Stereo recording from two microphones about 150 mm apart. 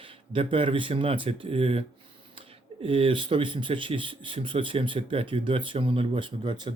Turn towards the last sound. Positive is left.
turn(degrees=-35)  # may be behind; listen again after turning